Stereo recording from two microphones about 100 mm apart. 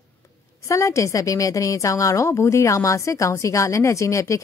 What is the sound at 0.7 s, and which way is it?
A woman's voice, 30° left (ahead or behind).